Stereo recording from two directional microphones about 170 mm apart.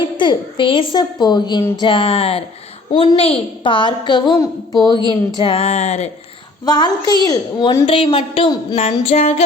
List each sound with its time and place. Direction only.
0.2 s a woman's voice: 30° left (ahead or behind)
1.8 s music: 30° left (ahead or behind)
2.9 s a woman's voice: 30° left (ahead or behind)
5.4 s music: 35° left (ahead or behind)
6.7 s a woman's voice: 25° left (ahead or behind)
7.9 s music: 30° left (ahead or behind)